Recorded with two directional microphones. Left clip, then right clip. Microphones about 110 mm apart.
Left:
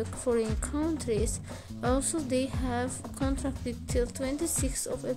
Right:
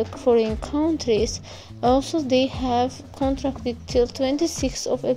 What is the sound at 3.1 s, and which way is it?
Speech, 5° right (ahead or behind).